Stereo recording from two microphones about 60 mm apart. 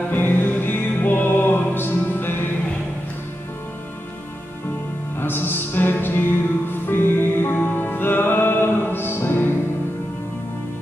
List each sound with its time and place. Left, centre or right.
0.1 s music: left
5.2 s music: left